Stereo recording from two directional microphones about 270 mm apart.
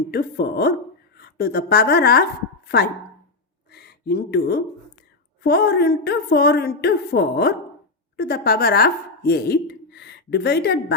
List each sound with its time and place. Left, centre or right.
0.1 s a woman's voice: left
3.7 s a woman's voice: left